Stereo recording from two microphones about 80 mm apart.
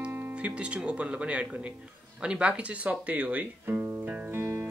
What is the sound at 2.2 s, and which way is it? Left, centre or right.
Guitar, centre.